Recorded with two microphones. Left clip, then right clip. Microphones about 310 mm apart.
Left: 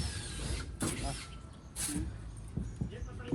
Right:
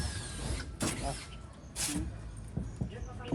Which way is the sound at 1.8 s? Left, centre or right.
Centre.